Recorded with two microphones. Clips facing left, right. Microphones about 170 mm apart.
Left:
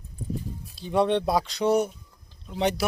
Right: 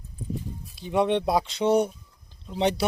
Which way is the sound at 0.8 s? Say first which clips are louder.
Even; 15° right (ahead or behind).